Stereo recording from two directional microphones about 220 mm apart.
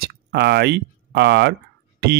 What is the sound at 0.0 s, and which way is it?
Speech, 50° right (ahead or behind).